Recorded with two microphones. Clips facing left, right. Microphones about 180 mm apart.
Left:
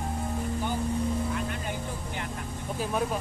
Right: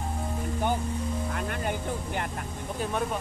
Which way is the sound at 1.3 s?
55° right (ahead or behind).